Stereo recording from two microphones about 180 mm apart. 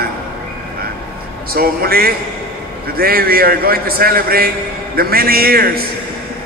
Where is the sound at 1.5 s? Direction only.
55° right (ahead or behind).